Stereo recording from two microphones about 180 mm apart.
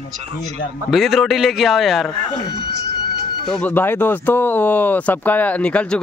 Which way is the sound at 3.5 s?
10° left (ahead or behind).